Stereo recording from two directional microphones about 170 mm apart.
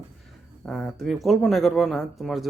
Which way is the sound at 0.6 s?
Centre (ahead or behind).